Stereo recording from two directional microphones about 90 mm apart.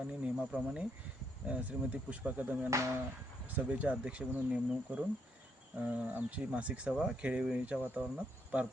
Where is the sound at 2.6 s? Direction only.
35° right (ahead or behind).